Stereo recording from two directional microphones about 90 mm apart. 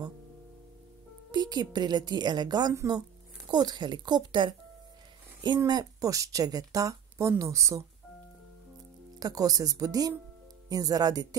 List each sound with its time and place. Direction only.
1.3 s a woman's voice: 50° right (ahead or behind)
5.7 s speech: 45° right (ahead or behind)
9.2 s a woman's voice: 40° right (ahead or behind)